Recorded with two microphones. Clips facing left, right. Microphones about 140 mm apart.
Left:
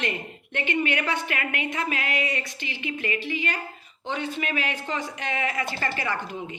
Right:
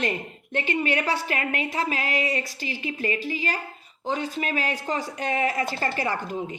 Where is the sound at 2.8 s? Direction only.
35° right (ahead or behind).